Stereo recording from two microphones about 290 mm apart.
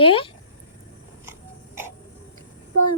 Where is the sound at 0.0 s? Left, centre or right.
Centre.